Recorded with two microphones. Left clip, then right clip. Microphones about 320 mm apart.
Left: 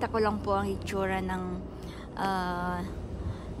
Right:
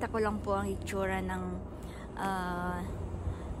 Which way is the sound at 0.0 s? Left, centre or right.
Centre.